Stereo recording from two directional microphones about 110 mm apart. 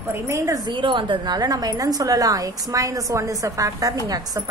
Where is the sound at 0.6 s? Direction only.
50° right (ahead or behind).